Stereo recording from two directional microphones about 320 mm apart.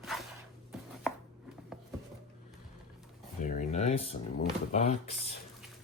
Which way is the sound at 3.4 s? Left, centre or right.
Left.